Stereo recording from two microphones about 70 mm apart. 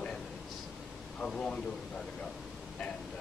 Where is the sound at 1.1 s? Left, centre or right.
Centre.